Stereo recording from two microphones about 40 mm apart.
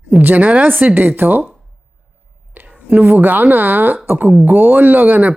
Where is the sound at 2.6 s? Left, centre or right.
Right.